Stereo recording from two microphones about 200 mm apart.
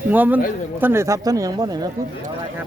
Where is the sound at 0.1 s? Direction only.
10° right (ahead or behind).